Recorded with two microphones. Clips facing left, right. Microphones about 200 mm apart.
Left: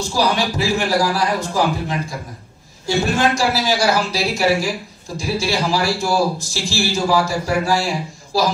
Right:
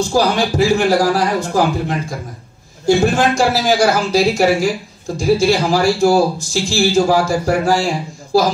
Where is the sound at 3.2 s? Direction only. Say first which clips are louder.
Right 3 dB; 45° right (ahead or behind).